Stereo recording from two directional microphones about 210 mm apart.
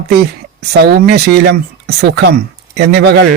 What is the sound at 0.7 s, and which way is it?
Speech, 50° right (ahead or behind).